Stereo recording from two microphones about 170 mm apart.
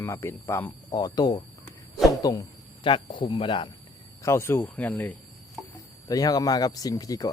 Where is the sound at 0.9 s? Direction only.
25° left (ahead or behind).